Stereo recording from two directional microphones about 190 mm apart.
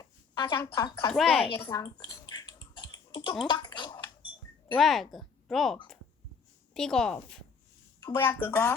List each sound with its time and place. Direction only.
0.0 s speech: 15° left (ahead or behind)
1.1 s speech: centre (ahead or behind)
1.6 s typing: 20° left (ahead or behind)
4.7 s speech: centre (ahead or behind)
8.0 s speech: 15° left (ahead or behind)